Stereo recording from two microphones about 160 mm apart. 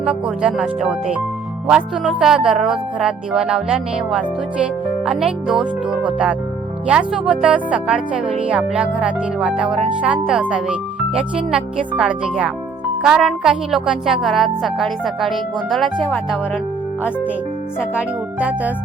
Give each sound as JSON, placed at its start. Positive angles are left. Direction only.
{"t": 0.0, "sound": "a woman's voice", "side_deg": -5}
{"t": 2.2, "sound": "a woman's voice", "side_deg": -5}
{"t": 17.9, "sound": "speech", "side_deg": -10}